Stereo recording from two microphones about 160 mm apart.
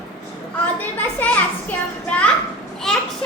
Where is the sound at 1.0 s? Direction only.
10° left (ahead or behind).